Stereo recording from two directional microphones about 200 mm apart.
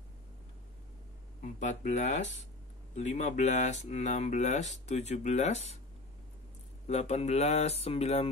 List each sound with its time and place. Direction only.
1.4 s speech: 35° left (ahead or behind)
6.9 s speech: 35° left (ahead or behind)